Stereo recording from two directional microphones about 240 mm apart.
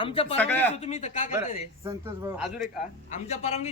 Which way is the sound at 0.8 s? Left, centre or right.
Left.